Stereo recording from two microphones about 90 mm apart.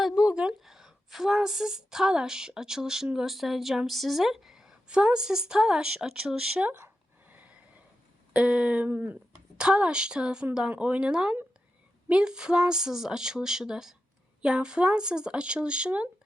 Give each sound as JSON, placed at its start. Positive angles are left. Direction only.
{"t": 0.0, "sound": "a woman's voice", "side_deg": -5}
{"t": 6.7, "sound": "a sound", "side_deg": -20}
{"t": 8.3, "sound": "speech", "side_deg": -15}